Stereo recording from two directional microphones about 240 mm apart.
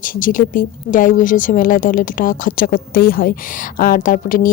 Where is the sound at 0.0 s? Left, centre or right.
Left.